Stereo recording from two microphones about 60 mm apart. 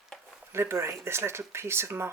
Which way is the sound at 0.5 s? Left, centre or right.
Right.